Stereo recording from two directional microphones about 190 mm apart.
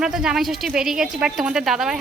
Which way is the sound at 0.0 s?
5° right (ahead or behind).